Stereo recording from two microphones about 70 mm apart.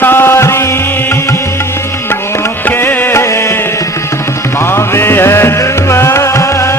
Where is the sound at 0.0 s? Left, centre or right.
Left.